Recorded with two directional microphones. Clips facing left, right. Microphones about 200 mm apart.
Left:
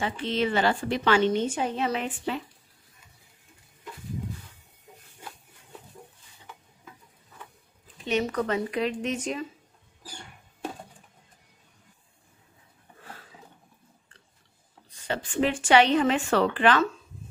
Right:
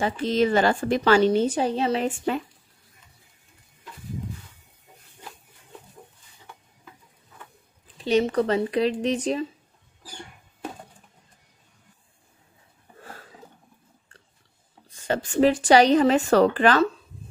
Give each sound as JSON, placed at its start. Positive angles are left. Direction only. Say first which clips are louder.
{"t": 0.0, "sound": "a woman's voice", "louder": "right 5 dB", "side_deg": -40}
{"t": 2.0, "sound": "speech", "louder": "right 6 dB", "side_deg": -50}
{"t": 8.0, "sound": "a woman's voice", "louder": "right 6 dB", "side_deg": -30}
{"t": 15.0, "sound": "a woman's voice", "louder": "right 6 dB", "side_deg": -40}